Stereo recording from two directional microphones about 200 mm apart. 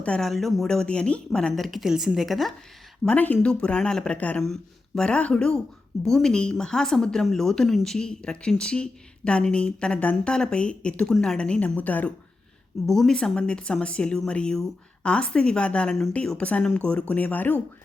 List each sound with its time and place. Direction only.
0.0 s speech: 5° left (ahead or behind)